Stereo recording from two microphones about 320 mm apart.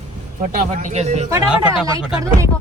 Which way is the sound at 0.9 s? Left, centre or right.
Right.